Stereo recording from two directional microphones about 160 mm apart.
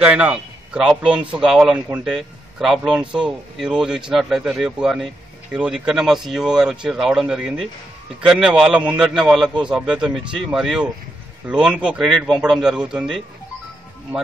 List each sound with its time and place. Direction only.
0.0 s a man's voice: 10° right (ahead or behind)